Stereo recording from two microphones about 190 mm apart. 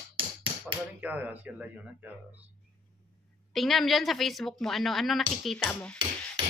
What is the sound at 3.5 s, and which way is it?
A woman's voice, centre (ahead or behind).